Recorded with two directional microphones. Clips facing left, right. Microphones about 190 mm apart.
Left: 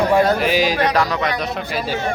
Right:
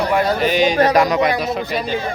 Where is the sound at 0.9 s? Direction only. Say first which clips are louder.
Right 4 dB; 15° right (ahead or behind).